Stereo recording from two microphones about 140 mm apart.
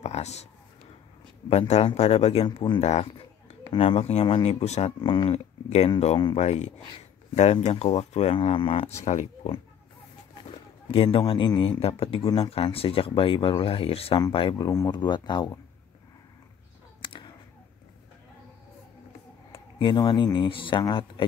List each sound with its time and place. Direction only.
0.0 s a sound: 50° left (ahead or behind)
1.5 s speech: 45° left (ahead or behind)
2.8 s speech: 50° left (ahead or behind)
3.6 s speech: 40° left (ahead or behind)
5.0 s speech: 40° left (ahead or behind)
14.7 s speech: 30° left (ahead or behind)
17.0 s a sound: 35° left (ahead or behind)
19.5 s speech: 35° left (ahead or behind)